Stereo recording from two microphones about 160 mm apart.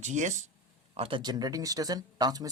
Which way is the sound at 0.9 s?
35° right (ahead or behind).